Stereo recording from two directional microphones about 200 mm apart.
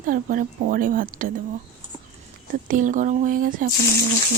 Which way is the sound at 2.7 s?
40° right (ahead or behind).